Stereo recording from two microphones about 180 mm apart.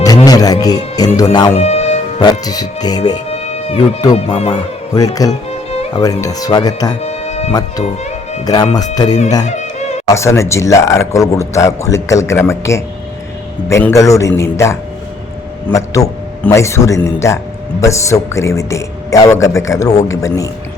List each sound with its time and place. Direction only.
0.3 s music: 20° left (ahead or behind)
1.5 s music: 35° left (ahead or behind)
2.4 s speech: 20° left (ahead or behind)
3.2 s music: 35° left (ahead or behind)
4.1 s speech: 35° left (ahead or behind)
4.9 s speech: 20° left (ahead or behind)
5.3 s music: 35° left (ahead or behind)
6.0 s speech: 20° left (ahead or behind)
7.0 s music: 35° left (ahead or behind)
9.0 s a man's voice: 20° left (ahead or behind)